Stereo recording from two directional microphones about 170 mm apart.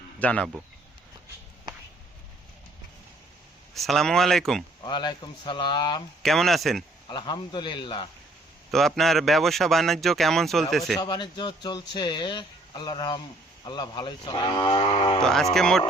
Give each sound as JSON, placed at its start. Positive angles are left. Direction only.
{"t": 0.2, "sound": "speech", "side_deg": 5}
{"t": 3.8, "sound": "speech", "side_deg": 0}
{"t": 4.8, "sound": "speech", "side_deg": 25}
{"t": 6.2, "sound": "speech", "side_deg": 0}
{"t": 7.1, "sound": "speech", "side_deg": 25}
{"t": 8.7, "sound": "speech", "side_deg": 0}
{"t": 11.0, "sound": "speech", "side_deg": 25}
{"t": 15.2, "sound": "speech", "side_deg": 5}